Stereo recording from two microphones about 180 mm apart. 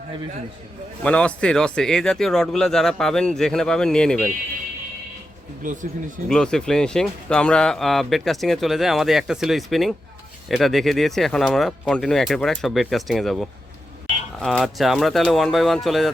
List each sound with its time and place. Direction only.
1.0 s speech: 5° left (ahead or behind)
5.6 s speech: 45° right (ahead or behind)
6.2 s speech: 5° left (ahead or behind)